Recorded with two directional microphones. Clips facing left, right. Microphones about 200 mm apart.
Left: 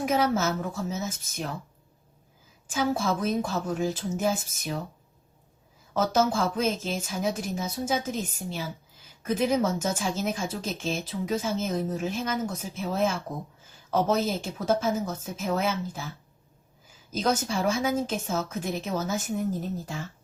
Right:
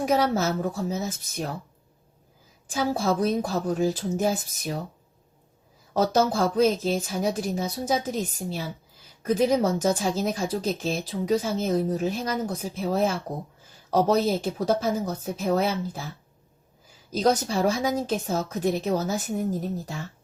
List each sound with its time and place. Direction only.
0.0 s a woman's voice: 35° right (ahead or behind)
2.6 s a woman's voice: 35° right (ahead or behind)
5.9 s a woman's voice: 35° right (ahead or behind)
17.1 s a woman's voice: 35° right (ahead or behind)